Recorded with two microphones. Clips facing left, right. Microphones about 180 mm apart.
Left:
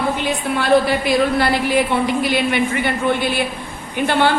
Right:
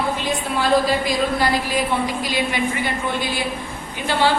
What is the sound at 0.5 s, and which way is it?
A woman's voice, 65° left (ahead or behind).